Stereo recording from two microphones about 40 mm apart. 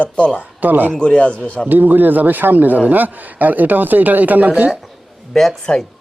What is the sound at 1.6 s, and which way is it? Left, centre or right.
A man's voice, right.